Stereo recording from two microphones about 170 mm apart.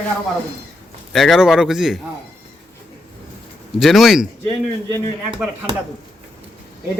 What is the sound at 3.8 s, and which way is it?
Speech, centre (ahead or behind).